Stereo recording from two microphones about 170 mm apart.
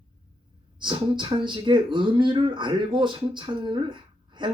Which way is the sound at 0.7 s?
30° right (ahead or behind).